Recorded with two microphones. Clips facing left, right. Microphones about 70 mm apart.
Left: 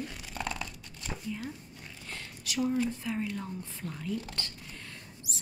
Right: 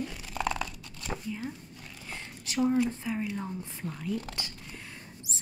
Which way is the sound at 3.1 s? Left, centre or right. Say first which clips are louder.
Right 1 dB; centre.